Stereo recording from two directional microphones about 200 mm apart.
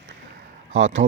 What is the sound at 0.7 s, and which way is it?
Speech, 75° right (ahead or behind).